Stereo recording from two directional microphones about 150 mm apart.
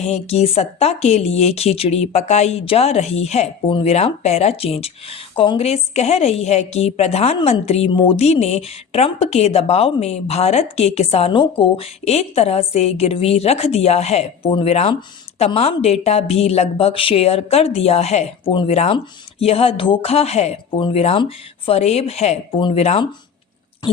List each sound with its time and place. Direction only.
0.0 s speech: 45° left (ahead or behind)
20.7 s speech: 35° left (ahead or behind)